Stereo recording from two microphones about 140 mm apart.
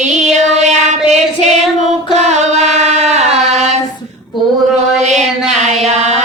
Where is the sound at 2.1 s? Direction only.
55° right (ahead or behind).